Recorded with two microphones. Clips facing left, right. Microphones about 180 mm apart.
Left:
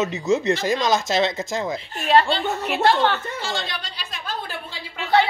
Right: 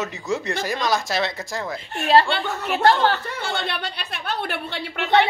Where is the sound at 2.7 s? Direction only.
40° right (ahead or behind).